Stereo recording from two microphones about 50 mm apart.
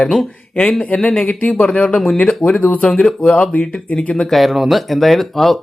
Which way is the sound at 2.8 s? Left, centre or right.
Centre.